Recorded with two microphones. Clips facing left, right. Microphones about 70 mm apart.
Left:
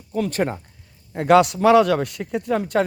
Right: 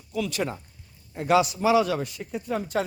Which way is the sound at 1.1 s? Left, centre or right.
Left.